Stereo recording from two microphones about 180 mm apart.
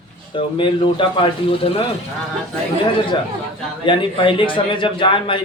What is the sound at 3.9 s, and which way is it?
A man's voice, 25° left (ahead or behind).